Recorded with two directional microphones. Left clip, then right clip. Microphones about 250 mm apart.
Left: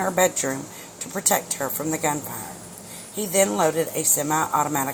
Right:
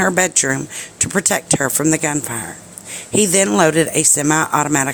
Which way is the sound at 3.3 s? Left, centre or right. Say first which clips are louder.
Right 4 dB; right.